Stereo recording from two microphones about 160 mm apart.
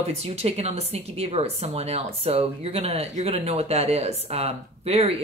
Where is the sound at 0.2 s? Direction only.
40° right (ahead or behind).